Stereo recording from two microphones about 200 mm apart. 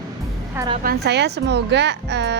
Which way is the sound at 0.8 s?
55° right (ahead or behind).